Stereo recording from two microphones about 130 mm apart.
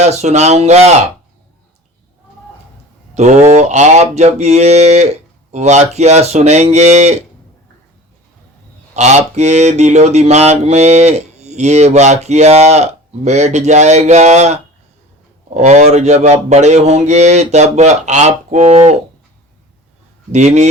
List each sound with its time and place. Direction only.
0.0 s mantra: 60° right (ahead or behind)
3.2 s mantra: 65° right (ahead or behind)
9.0 s mantra: 60° right (ahead or behind)
20.3 s mantra: 60° right (ahead or behind)